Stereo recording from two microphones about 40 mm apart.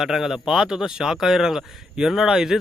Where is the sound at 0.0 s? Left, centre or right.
Centre.